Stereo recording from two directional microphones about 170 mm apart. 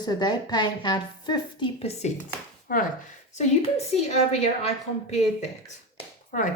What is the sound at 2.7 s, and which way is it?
Speech, 60° left (ahead or behind).